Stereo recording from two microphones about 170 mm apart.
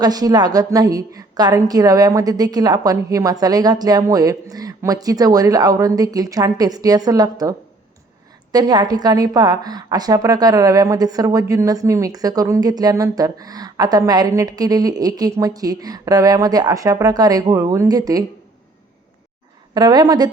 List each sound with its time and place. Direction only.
0.0 s a woman's voice: 20° right (ahead or behind)
8.5 s a woman's voice: 25° right (ahead or behind)
19.7 s a woman's voice: 25° right (ahead or behind)